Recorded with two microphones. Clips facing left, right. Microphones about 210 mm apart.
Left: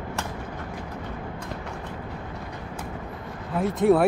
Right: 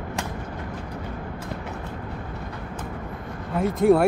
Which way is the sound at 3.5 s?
Centre (ahead or behind).